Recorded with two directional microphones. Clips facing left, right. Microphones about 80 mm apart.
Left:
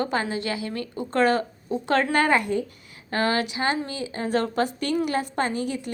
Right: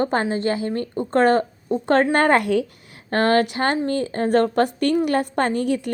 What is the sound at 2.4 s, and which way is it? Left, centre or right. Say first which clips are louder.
Speech: right 5 dB; right.